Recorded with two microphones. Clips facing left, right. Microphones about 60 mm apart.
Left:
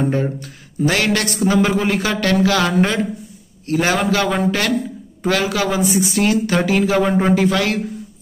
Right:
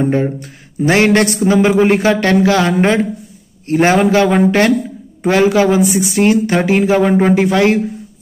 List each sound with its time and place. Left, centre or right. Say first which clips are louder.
0.1 s a man's voice: right 5 dB; right